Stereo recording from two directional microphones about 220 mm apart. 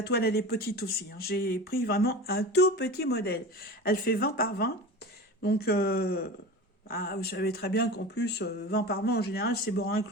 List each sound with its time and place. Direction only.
0.0 s speech: 45° left (ahead or behind)